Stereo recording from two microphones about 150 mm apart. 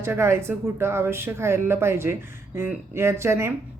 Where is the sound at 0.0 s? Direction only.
15° right (ahead or behind).